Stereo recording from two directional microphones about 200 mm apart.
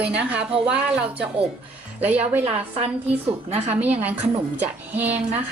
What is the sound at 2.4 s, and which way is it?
Speech, 30° right (ahead or behind).